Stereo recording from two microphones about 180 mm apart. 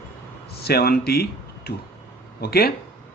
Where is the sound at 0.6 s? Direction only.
60° left (ahead or behind).